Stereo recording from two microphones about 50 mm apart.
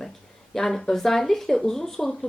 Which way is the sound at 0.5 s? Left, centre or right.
Centre.